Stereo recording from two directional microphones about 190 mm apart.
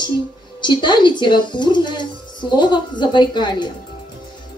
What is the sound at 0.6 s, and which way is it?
A woman's voice, 25° left (ahead or behind).